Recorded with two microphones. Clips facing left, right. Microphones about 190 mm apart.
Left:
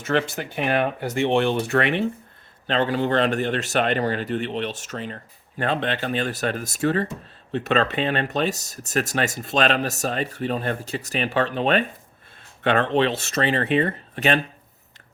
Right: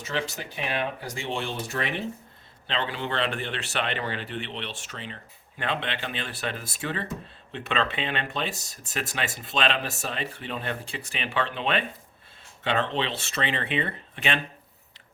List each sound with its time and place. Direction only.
0.0 s speech: 55° left (ahead or behind)
2.6 s a man's voice: 45° left (ahead or behind)
12.6 s a man's voice: 55° left (ahead or behind)